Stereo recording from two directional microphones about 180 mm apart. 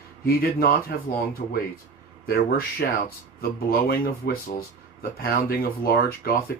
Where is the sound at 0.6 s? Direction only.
55° left (ahead or behind).